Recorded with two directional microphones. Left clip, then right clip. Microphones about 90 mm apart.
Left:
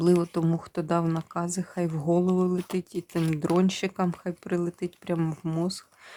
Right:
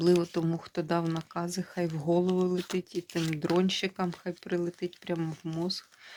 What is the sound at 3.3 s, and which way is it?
Speech, 45° left (ahead or behind).